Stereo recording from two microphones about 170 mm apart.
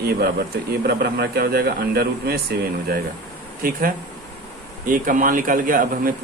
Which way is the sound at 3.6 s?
60° right (ahead or behind).